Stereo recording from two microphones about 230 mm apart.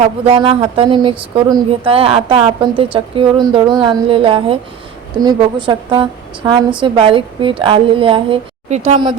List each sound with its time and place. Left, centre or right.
0.0 s a woman's voice: right